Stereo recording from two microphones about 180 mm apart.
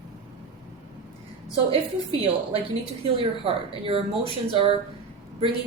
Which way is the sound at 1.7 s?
30° right (ahead or behind).